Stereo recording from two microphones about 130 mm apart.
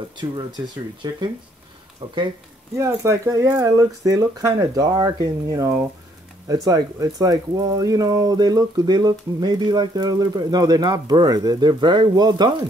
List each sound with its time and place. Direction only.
2.8 s speech: 20° right (ahead or behind)